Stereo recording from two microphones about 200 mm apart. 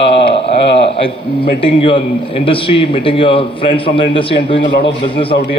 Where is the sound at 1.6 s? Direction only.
25° left (ahead or behind).